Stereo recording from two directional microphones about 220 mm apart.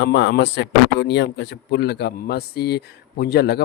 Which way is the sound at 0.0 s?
55° left (ahead or behind).